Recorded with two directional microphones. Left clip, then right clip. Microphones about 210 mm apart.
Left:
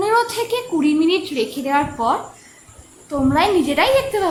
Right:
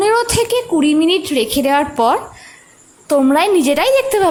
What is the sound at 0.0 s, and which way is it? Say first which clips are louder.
A woman's voice: right 4 dB; 35° right (ahead or behind).